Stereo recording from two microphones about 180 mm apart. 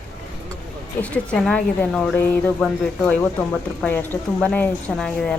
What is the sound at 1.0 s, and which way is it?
A woman's voice, 5° left (ahead or behind).